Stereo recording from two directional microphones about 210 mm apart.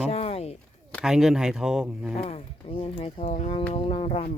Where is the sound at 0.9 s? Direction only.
Centre (ahead or behind).